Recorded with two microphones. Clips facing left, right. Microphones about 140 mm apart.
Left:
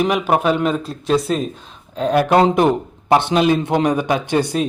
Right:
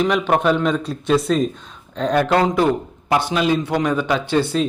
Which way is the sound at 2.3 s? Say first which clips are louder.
Left 5 dB; 20° left (ahead or behind).